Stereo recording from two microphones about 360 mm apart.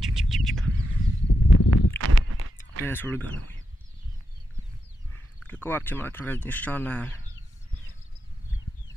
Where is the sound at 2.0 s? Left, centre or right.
Right.